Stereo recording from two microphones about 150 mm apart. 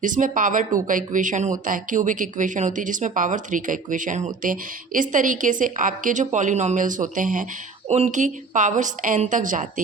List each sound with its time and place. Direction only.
0.0 s speech: 60° right (ahead or behind)
7.9 s speech: 50° right (ahead or behind)